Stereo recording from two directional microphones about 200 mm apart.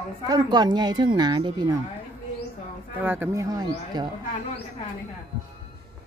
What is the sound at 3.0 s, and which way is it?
Speech, 10° right (ahead or behind).